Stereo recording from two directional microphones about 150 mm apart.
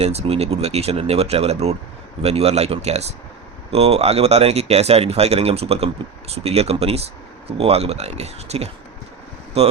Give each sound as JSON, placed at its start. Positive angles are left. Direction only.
{"t": 0.0, "sound": "speech", "side_deg": -45}